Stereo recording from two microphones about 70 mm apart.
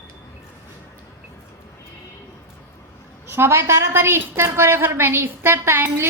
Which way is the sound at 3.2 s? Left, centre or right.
Right.